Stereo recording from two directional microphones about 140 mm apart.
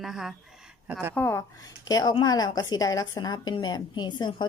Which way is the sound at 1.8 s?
30° left (ahead or behind).